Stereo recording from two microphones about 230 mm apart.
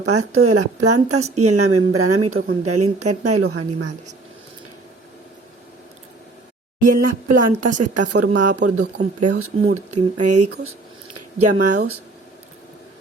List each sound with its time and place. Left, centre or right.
0.0 s a woman's voice: right
6.8 s speech: right
10.2 s speech: right